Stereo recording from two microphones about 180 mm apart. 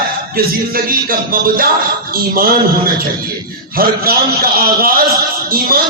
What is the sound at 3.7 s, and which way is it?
Speech, 55° right (ahead or behind).